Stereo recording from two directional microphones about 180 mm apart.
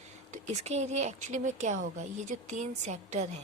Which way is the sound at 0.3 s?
40° right (ahead or behind).